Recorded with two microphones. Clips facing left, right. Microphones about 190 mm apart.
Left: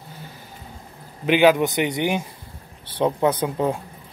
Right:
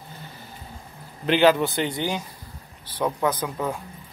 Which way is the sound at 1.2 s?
10° left (ahead or behind).